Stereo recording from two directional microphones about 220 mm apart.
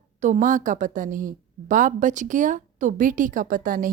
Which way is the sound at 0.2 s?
35° right (ahead or behind).